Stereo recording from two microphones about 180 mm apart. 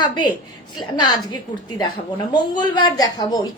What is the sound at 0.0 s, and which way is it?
A woman's voice, 25° left (ahead or behind).